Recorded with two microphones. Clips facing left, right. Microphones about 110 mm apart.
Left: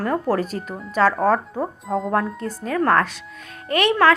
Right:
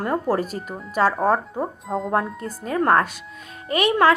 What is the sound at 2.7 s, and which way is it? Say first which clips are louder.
Speech: even; 35° right (ahead or behind).